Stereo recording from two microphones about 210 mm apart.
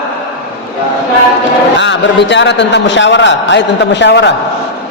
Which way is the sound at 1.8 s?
60° left (ahead or behind).